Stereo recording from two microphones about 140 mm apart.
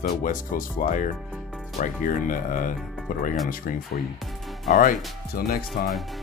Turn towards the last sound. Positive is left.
turn(degrees=90)